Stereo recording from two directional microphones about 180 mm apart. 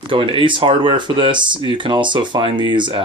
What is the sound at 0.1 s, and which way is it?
Speech, 30° right (ahead or behind).